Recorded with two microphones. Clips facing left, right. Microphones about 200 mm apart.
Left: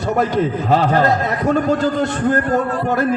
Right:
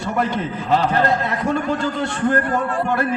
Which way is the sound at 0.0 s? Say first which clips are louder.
Left 5 dB; 40° left (ahead or behind).